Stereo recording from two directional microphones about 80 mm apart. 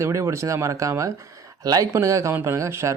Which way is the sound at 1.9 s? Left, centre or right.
Right.